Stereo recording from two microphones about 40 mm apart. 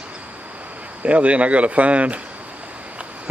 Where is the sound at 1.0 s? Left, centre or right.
Right.